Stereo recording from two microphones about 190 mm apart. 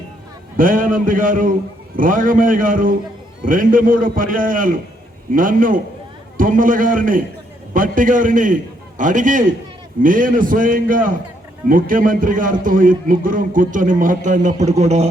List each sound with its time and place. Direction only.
0.5 s a man's voice: 45° right (ahead or behind)